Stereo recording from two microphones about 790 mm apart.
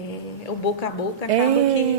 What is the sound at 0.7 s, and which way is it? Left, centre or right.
Speech, left.